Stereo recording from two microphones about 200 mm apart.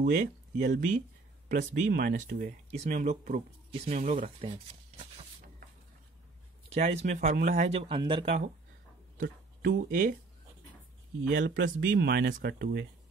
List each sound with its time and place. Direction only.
0.0 s speech: 50° right (ahead or behind); by 5.0 s 35° right (ahead or behind)
6.7 s speech: 35° right (ahead or behind)
9.2 s speech: 50° right (ahead or behind)
11.3 s speech: 60° right (ahead or behind)